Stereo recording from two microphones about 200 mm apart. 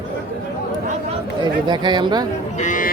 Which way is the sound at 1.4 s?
20° right (ahead or behind).